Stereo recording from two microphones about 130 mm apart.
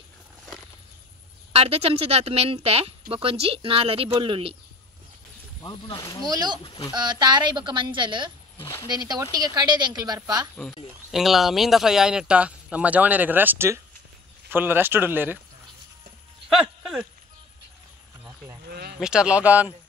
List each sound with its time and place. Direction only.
1.5 s speech: 50° right (ahead or behind)
5.6 s speech: 35° left (ahead or behind)
6.2 s a woman's voice: 30° right (ahead or behind)
6.6 s speech: 40° left (ahead or behind)
6.9 s a woman's voice: 35° right (ahead or behind)
8.5 s speech: 20° left (ahead or behind)
8.8 s a woman's voice: 30° right (ahead or behind)
11.1 s speech: centre (ahead or behind)
16.4 s a sound: centre (ahead or behind)
18.9 s speech: 5° right (ahead or behind)